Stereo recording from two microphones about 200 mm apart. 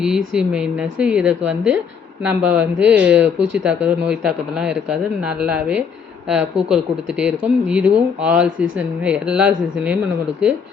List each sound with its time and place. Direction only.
0.0 s speech: 5° right (ahead or behind)
8.5 s speech: 75° right (ahead or behind)
9.0 s speech: 5° right (ahead or behind)